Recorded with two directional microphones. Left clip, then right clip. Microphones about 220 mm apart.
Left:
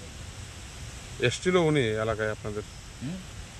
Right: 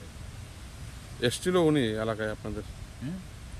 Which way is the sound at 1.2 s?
25° left (ahead or behind).